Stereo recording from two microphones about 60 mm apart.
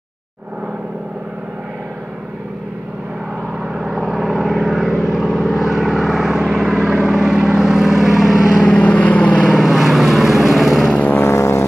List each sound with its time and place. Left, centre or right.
3.6 s vehicle: centre
9.5 s vehicle: centre
11.1 s vehicle: left